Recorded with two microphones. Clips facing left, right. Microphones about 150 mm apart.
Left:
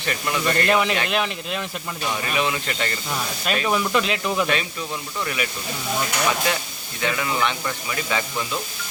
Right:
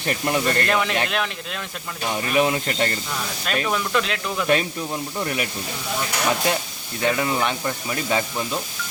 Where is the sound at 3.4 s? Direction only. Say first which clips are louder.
Left 2 dB; 10° left (ahead or behind).